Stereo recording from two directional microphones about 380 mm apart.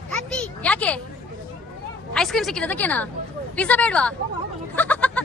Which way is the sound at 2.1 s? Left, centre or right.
Centre.